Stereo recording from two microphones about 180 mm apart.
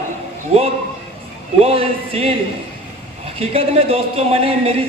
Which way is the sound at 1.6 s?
30° right (ahead or behind).